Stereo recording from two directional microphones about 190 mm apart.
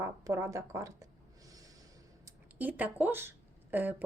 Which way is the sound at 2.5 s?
10° right (ahead or behind).